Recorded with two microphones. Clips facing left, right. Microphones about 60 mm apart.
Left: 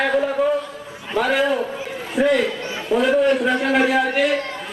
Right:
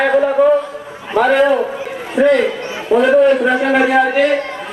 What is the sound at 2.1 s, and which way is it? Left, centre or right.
A man's voice, centre.